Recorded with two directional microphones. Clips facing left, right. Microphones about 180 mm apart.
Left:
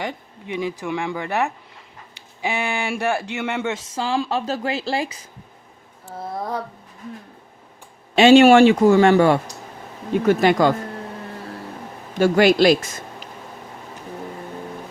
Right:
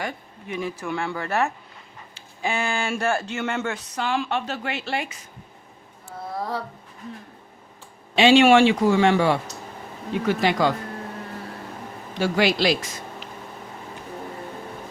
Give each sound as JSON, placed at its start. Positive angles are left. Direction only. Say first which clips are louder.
{"t": 0.0, "sound": "speech", "louder": "left 2 dB", "side_deg": 20}
{"t": 3.9, "sound": "speech", "louder": "left 2 dB", "side_deg": 30}
{"t": 8.1, "sound": "speech", "louder": "left 4 dB", "side_deg": 45}
{"t": 12.1, "sound": "speech", "louder": "left 6 dB", "side_deg": 50}